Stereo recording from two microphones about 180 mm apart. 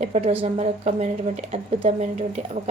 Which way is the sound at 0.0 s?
35° right (ahead or behind).